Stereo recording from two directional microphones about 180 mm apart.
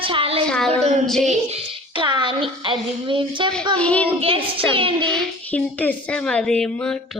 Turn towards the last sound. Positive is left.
turn(degrees=5)  # may be behind; listen again after turning